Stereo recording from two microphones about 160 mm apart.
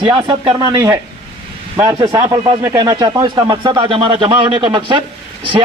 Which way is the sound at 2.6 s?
25° right (ahead or behind).